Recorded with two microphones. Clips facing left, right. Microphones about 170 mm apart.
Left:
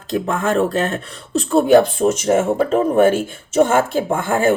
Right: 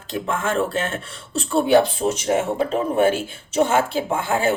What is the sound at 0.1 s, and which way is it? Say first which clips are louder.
Speech: left 5 dB; 40° left (ahead or behind).